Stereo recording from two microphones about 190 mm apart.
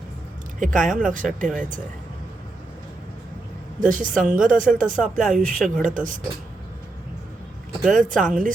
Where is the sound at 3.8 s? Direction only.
45° right (ahead or behind).